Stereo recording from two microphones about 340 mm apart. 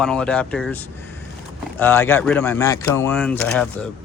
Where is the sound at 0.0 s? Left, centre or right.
Centre.